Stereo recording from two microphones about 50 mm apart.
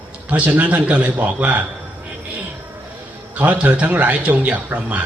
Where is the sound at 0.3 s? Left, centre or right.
Right.